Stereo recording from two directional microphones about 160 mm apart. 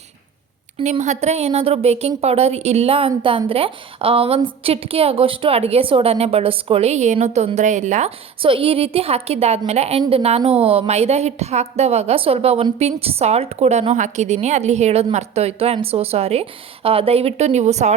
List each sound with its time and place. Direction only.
0.8 s a woman's voice: 45° right (ahead or behind)
8.4 s a woman's voice: 35° right (ahead or behind)